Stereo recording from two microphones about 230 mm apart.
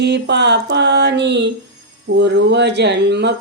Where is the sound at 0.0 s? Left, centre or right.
Right.